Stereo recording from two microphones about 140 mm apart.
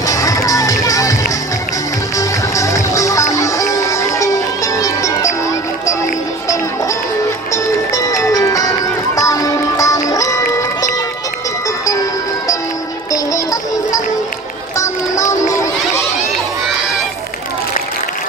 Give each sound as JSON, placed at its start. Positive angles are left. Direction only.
{"t": 0.0, "sound": "music", "side_deg": 25}
{"t": 2.1, "sound": "music", "side_deg": 20}
{"t": 7.5, "sound": "music", "side_deg": 25}
{"t": 13.1, "sound": "music", "side_deg": 25}
{"t": 14.8, "sound": "a sound", "side_deg": 20}